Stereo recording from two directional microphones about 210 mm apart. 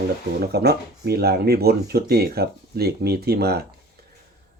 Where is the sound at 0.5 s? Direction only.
50° right (ahead or behind).